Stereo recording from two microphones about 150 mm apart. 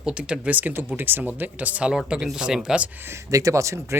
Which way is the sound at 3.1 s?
20° right (ahead or behind).